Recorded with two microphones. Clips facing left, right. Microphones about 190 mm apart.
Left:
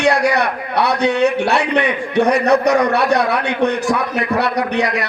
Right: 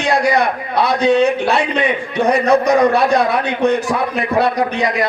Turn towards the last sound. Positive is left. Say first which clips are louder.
# right 1 dB
turn(degrees=70)  # may be behind; listen again after turning